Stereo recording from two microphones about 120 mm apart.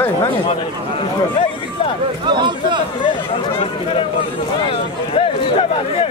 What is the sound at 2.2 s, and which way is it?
Speech, 40° right (ahead or behind).